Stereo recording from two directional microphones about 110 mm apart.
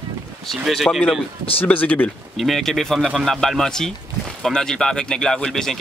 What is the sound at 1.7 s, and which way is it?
Speech, 15° left (ahead or behind).